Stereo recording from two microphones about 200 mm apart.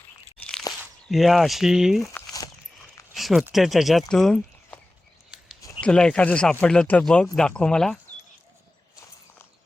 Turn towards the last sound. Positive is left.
turn(degrees=5)  # may be behind; listen again after turning